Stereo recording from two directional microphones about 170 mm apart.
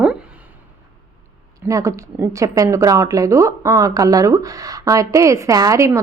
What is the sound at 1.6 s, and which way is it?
A woman's voice, 20° right (ahead or behind).